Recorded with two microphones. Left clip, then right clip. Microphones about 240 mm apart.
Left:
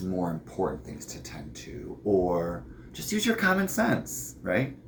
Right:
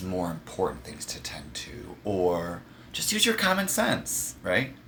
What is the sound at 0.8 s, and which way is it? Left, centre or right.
Speech, right.